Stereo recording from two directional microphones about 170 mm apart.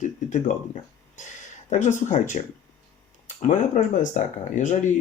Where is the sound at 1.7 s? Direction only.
45° left (ahead or behind).